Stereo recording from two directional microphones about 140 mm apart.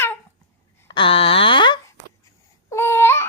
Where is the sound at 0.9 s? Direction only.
40° left (ahead or behind).